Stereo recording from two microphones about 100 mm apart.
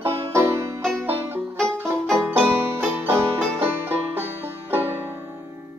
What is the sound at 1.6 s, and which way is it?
Music, 5° left (ahead or behind).